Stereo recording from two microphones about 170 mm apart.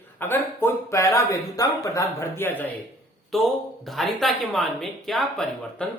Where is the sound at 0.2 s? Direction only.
10° left (ahead or behind).